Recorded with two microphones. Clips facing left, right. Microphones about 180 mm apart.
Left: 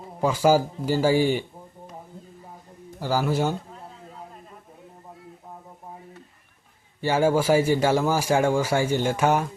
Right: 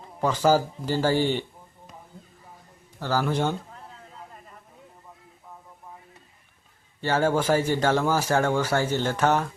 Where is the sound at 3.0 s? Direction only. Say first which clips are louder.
Left 1 dB; 10° left (ahead or behind).